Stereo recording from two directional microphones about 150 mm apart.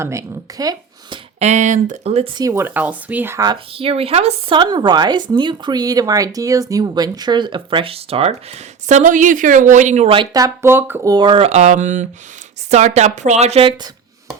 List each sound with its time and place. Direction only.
0.0 s speech: 20° right (ahead or behind)
1.4 s speech: 50° right (ahead or behind)
2.3 s speech: 20° right (ahead or behind)
3.4 s speech: 35° right (ahead or behind); by 10.1 s 55° right (ahead or behind)
10.1 s speech: 30° right (ahead or behind)
11.1 s speech: 30° right (ahead or behind)